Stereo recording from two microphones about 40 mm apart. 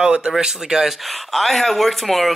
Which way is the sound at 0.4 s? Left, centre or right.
Centre.